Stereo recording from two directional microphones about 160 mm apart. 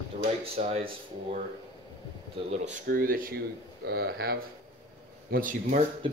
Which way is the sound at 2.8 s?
65° right (ahead or behind).